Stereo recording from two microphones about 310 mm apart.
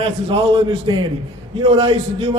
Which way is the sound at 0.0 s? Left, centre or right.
Centre.